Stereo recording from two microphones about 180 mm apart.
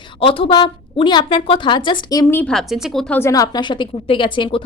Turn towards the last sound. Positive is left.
turn(degrees=30)  # may be behind; listen again after turning